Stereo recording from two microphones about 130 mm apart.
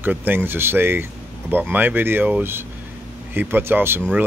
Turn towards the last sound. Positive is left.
turn(degrees=-15)  # may be behind; listen again after turning